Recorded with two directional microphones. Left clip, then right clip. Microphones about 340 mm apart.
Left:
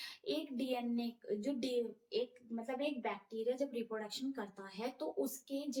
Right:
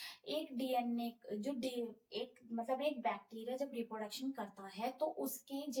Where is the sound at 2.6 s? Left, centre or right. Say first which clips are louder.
Right 2 dB; centre.